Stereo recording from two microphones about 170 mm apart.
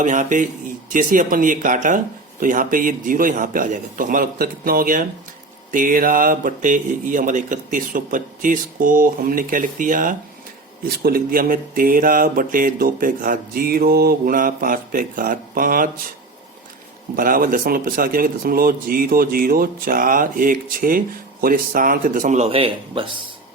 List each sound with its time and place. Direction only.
0.0 s speech: 50° right (ahead or behind)
10.8 s speech: 65° right (ahead or behind)
17.2 s speech: 55° right (ahead or behind)
22.4 s a man's voice: 35° right (ahead or behind)